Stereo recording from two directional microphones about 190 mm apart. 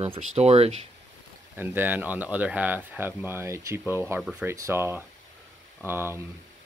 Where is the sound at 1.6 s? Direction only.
10° right (ahead or behind).